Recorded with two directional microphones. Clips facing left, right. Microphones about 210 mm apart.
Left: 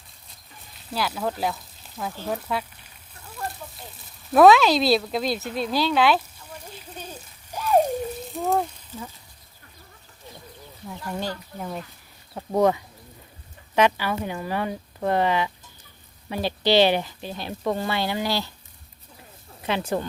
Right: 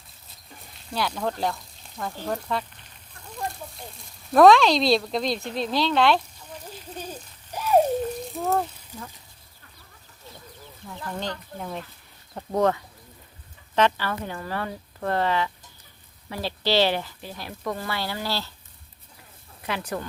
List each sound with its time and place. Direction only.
0.9 s sizzle: 5° left (ahead or behind)
2.2 s speech: 5° left (ahead or behind)
6.9 s a sound: 10° right (ahead or behind)
8.3 s a sound: centre (ahead or behind)
8.9 s speech: 15° right (ahead or behind)
10.8 s speech: 10° left (ahead or behind)
19.6 s speech: 25° left (ahead or behind)